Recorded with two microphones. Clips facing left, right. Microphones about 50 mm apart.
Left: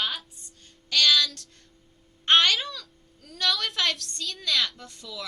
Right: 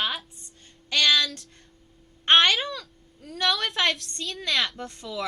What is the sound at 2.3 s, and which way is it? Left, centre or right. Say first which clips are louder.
Speech: right 2 dB; centre.